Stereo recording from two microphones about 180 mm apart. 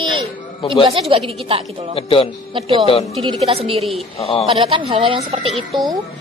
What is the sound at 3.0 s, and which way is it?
Speech, centre (ahead or behind).